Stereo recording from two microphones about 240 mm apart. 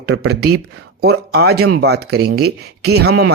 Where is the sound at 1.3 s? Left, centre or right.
Right.